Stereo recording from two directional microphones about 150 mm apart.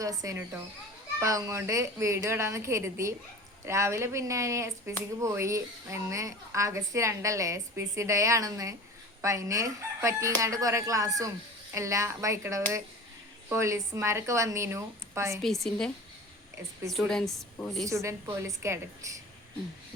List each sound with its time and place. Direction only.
0.0 s a woman's voice: 20° right (ahead or behind)
15.4 s a woman's voice: centre (ahead or behind)
16.9 s a woman's voice: 5° left (ahead or behind)
17.8 s a woman's voice: 20° right (ahead or behind)